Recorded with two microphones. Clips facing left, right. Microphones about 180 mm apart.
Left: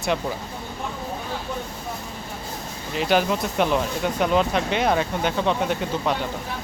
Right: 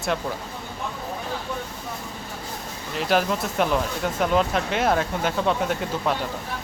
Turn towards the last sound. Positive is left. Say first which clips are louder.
# left 1 dB
turn(degrees=0)  # may be behind; listen again after turning